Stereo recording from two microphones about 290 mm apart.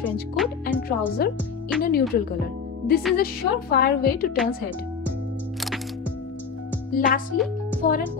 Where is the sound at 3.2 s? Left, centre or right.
Left.